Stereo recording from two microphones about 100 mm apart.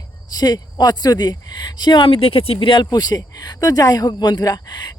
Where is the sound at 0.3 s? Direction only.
40° left (ahead or behind); by 2.8 s 60° left (ahead or behind).